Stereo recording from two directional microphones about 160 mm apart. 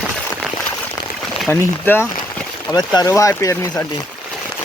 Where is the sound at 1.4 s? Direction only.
10° left (ahead or behind).